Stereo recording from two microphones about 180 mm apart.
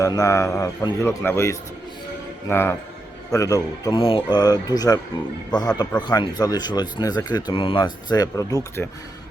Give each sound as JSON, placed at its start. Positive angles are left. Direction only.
{"t": 0.0, "sound": "a man's voice", "side_deg": 20}